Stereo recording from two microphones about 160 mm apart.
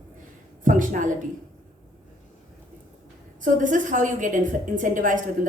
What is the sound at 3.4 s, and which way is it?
A woman's voice, 55° right (ahead or behind).